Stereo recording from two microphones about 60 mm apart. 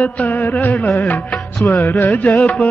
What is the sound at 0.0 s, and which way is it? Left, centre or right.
Music, left.